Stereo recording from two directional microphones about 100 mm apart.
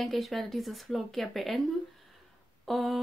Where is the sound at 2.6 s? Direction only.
Centre (ahead or behind).